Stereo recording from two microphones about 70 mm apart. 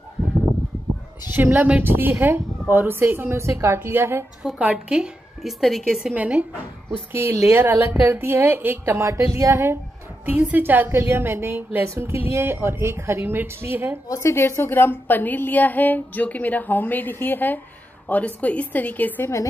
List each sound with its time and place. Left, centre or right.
1.2 s a woman's voice: right
4.4 s speech: centre
5.4 s a woman's voice: centre
6.1 s a woman's voice: right
7.1 s a woman's voice: right
8.9 s speech: right
10.2 s a woman's voice: right
14.0 s a woman's voice: left
14.3 s speech: left